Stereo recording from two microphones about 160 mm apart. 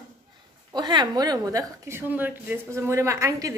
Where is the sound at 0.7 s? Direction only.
25° right (ahead or behind).